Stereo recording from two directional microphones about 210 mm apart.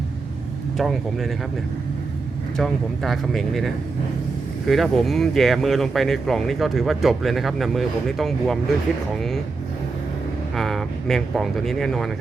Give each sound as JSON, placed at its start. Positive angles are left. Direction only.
{"t": 0.8, "sound": "speech", "side_deg": 0}
{"t": 2.6, "sound": "speech", "side_deg": 0}
{"t": 10.5, "sound": "speech", "side_deg": 0}